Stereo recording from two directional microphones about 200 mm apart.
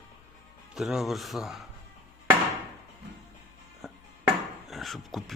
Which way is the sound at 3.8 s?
Centre (ahead or behind).